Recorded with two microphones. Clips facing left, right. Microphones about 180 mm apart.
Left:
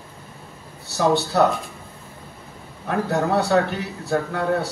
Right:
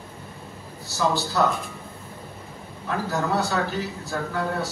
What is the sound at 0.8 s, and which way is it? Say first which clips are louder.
Speech: left 5 dB; 65° left (ahead or behind).